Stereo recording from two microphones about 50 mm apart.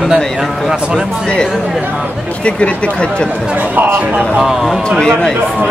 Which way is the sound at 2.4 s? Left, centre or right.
Left.